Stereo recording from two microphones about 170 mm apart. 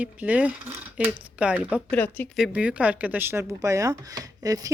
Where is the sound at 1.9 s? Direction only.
10° left (ahead or behind).